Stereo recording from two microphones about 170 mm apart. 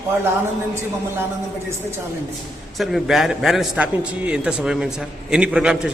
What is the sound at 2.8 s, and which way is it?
A man's voice, centre (ahead or behind).